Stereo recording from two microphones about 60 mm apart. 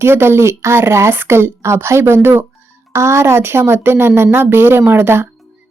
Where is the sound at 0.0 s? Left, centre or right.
Right.